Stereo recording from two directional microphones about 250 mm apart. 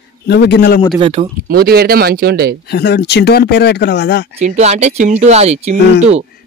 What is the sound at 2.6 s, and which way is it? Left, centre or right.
Speech, left.